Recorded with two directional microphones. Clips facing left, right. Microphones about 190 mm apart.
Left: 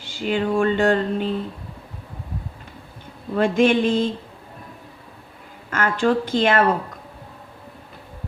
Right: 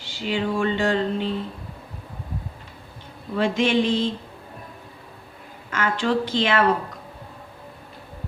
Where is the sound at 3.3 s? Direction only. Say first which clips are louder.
Left 3 dB; 50° left (ahead or behind).